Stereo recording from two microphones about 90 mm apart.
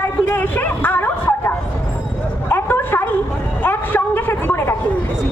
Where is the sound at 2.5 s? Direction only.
25° left (ahead or behind).